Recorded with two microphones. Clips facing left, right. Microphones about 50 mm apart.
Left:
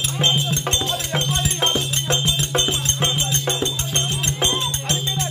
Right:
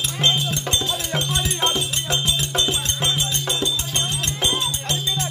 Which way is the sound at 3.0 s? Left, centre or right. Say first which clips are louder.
Left 2 dB; left.